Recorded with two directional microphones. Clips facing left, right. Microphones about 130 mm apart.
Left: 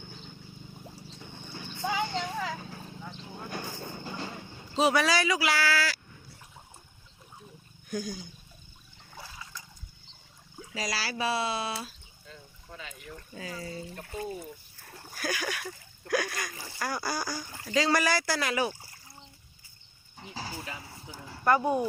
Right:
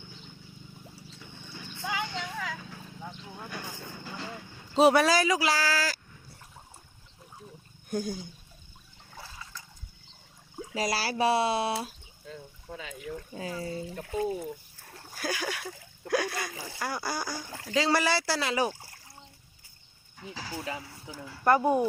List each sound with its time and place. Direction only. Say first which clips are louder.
0.9 s vehicle: left 3 dB; 40° left (ahead or behind)
4.8 s speech: right 4 dB; 50° right (ahead or behind)
7.9 s speech: right 3 dB; 55° right (ahead or behind)
9.1 s water: even; centre (ahead or behind)
10.8 s speech: right 5 dB; 55° right (ahead or behind)
13.5 s speech: right 4 dB; 25° right (ahead or behind)
13.9 s speech: right 9 dB; 90° right
15.1 s speech: even; 25° right (ahead or behind)
20.1 s a sound: left 1 dB; 30° left (ahead or behind)
21.6 s speech: right 3 dB; 10° right (ahead or behind)